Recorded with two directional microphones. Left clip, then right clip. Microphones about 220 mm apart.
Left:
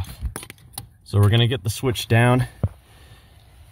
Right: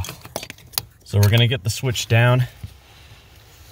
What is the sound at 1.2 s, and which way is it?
Speech, 20° left (ahead or behind).